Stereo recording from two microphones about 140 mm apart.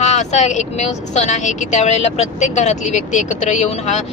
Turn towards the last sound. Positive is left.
turn(degrees=55)  # may be behind; listen again after turning